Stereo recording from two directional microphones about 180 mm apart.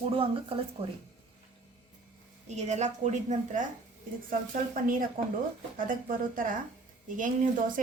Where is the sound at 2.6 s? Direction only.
40° right (ahead or behind).